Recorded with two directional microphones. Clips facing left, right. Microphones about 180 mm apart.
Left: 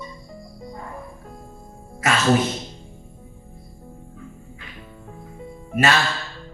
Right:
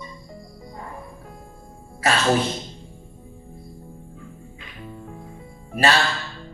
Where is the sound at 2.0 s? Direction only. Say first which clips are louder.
Even; 30° right (ahead or behind).